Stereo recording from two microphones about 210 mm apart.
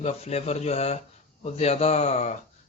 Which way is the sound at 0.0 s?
30° left (ahead or behind).